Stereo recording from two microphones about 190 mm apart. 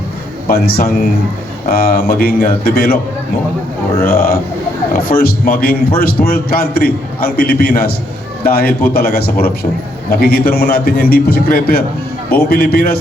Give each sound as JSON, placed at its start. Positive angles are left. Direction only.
{"t": 0.4, "sound": "a man's voice", "side_deg": 55}
{"t": 4.0, "sound": "a man's voice", "side_deg": 55}